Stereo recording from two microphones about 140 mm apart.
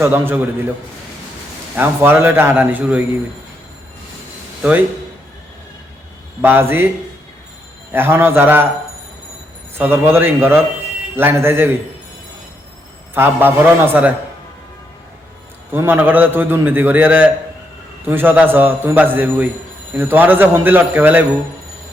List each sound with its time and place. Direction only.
0.0 s a man's voice: 15° right (ahead or behind)
1.7 s a man's voice: 15° right (ahead or behind)
6.4 s a man's voice: 15° right (ahead or behind)
7.9 s a man's voice: 15° right (ahead or behind)
9.7 s a man's voice: 15° right (ahead or behind)
13.1 s a man's voice: 15° right (ahead or behind)
15.7 s a man's voice: 15° right (ahead or behind)